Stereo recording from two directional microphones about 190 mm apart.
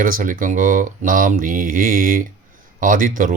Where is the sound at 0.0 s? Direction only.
45° right (ahead or behind).